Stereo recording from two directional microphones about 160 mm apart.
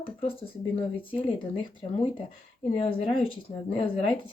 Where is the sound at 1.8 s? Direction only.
40° left (ahead or behind).